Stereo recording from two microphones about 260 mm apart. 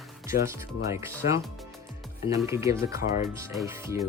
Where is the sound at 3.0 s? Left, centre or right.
Left.